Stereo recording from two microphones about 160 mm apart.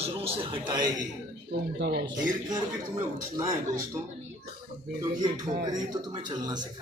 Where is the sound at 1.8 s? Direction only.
80° right.